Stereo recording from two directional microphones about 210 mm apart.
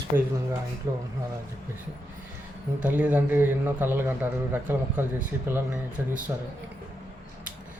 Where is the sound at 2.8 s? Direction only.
5° right (ahead or behind).